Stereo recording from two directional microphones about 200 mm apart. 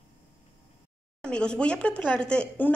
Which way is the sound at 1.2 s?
5° left (ahead or behind).